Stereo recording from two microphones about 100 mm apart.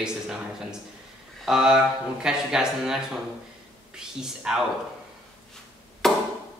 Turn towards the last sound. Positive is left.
turn(degrees=5)  # may be behind; listen again after turning